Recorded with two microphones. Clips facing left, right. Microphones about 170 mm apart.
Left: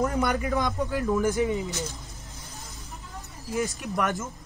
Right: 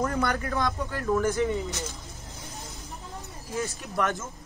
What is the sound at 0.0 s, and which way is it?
Speech, 20° left (ahead or behind).